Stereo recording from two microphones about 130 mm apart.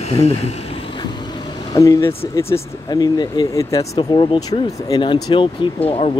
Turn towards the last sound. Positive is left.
turn(degrees=45)  # may be behind; listen again after turning